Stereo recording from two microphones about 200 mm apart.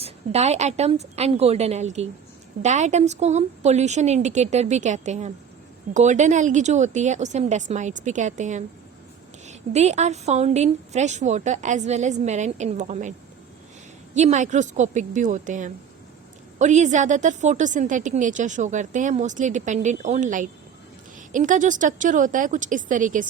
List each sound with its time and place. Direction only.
0.0 s a woman's voice: 35° right (ahead or behind)